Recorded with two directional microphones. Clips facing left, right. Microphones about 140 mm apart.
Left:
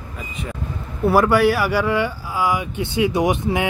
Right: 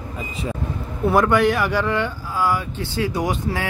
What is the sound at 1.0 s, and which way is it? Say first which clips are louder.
Speech: left 2 dB; 5° left (ahead or behind).